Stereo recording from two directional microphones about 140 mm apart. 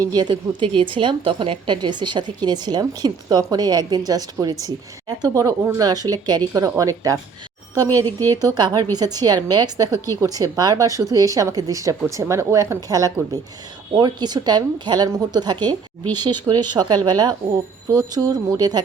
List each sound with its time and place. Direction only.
0.1 s a woman's voice: 30° right (ahead or behind)